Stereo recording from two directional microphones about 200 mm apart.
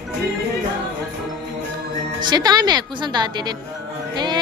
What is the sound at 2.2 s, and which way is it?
A woman's voice, 20° right (ahead or behind).